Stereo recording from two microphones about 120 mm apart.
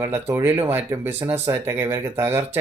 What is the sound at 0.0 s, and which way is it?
Speech, 20° right (ahead or behind).